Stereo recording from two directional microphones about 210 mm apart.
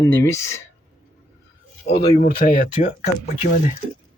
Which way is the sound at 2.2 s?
45° left (ahead or behind).